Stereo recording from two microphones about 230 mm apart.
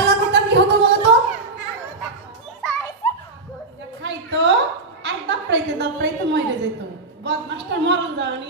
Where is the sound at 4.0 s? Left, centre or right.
Right.